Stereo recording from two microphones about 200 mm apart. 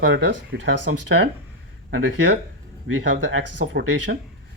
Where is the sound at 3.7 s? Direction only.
60° right (ahead or behind).